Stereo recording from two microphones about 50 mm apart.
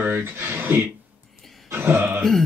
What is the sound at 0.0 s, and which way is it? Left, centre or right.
Speech, right.